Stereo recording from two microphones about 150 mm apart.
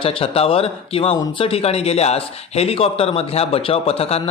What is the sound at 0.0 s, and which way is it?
A man's voice, 40° left (ahead or behind).